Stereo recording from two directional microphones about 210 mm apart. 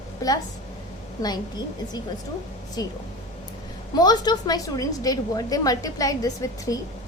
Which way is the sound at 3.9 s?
20° left (ahead or behind).